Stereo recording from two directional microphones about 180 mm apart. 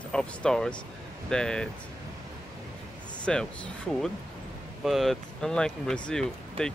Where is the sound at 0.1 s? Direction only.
5° left (ahead or behind).